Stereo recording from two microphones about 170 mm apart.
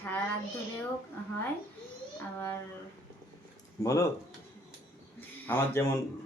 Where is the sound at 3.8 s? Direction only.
20° left (ahead or behind).